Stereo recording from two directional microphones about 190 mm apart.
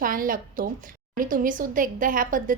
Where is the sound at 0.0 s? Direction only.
45° right (ahead or behind).